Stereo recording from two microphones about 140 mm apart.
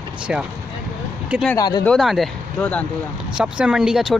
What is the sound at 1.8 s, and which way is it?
Speech, centre (ahead or behind).